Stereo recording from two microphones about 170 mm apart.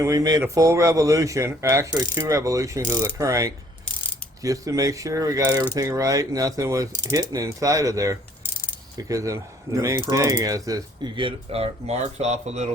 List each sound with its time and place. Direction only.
0.0 s speech: 20° right (ahead or behind); by 12.6 s 40° right (ahead or behind)